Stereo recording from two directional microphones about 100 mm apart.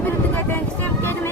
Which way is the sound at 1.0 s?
20° left (ahead or behind).